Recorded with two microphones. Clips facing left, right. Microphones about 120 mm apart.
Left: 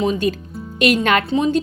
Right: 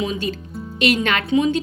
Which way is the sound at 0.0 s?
45° left (ahead or behind).